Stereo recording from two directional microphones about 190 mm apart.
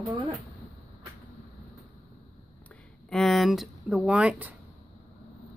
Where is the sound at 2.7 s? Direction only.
Centre (ahead or behind).